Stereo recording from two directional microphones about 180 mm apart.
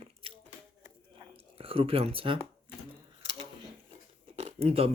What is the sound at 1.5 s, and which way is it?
Speech, 30° right (ahead or behind).